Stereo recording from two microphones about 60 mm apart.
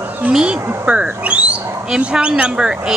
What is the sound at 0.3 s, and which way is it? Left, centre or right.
Speech, centre.